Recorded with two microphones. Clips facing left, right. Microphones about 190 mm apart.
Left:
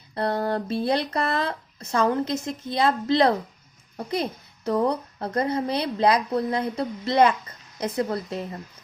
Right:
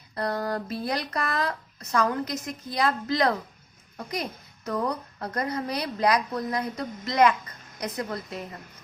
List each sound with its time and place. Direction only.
0.1 s a woman's voice: 25° left (ahead or behind)